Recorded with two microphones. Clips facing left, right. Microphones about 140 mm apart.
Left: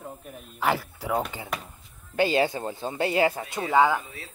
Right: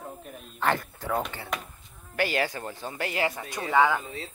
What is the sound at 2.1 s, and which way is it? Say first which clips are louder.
Speech: left 5 dB; 25° left (ahead or behind).